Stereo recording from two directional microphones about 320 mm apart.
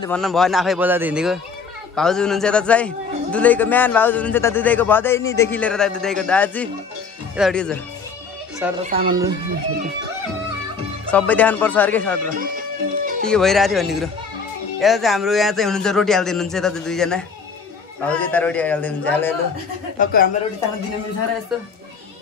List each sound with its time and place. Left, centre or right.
0.0 s a man's voice: centre
8.8 s speech: centre
11.1 s a man's voice: centre
13.0 s music: right
13.3 s a man's voice: centre
20.0 s a woman's voice: left